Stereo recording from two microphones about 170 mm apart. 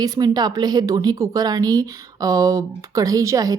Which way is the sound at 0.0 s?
25° right (ahead or behind).